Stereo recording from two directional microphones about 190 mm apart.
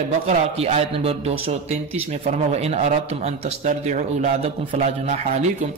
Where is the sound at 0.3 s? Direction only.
35° right (ahead or behind).